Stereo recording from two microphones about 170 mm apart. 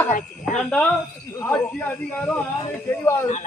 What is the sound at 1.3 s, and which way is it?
Speech, 15° left (ahead or behind).